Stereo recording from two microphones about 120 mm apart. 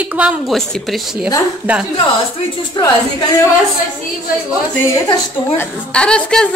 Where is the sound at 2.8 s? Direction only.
40° left (ahead or behind).